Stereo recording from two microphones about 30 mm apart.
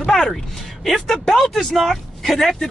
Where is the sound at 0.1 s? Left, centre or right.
Centre.